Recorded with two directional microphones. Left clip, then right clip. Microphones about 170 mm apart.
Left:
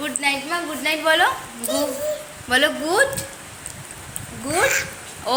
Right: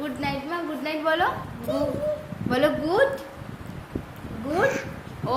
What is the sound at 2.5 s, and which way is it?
Speech, 5° left (ahead or behind).